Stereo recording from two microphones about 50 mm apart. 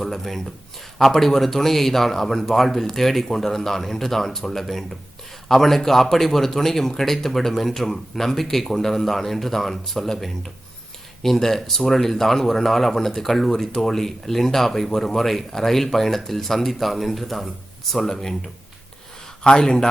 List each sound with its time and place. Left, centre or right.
0.0 s speech: centre
19.5 s speech: centre